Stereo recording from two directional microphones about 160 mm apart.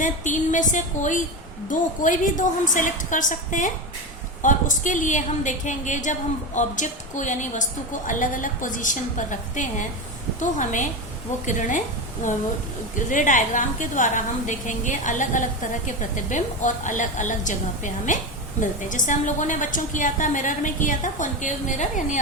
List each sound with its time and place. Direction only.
0.0 s a woman's voice: 50° left (ahead or behind)